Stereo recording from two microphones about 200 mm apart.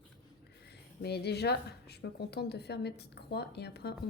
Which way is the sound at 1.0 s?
55° left (ahead or behind).